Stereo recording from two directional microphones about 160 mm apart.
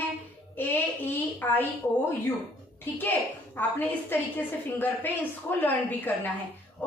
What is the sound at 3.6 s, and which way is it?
A woman's voice, 10° left (ahead or behind).